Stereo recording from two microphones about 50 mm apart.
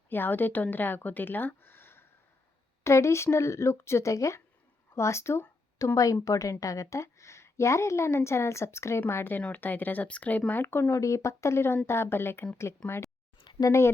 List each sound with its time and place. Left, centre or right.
0.1 s speech: left
2.8 s speech: left
4.9 s a woman's voice: left
9.0 s a woman's voice: left
9.5 s speech: left
10.6 s a woman's voice: left
11.0 s a woman's voice: left
12.8 s speech: left
13.7 s speech: left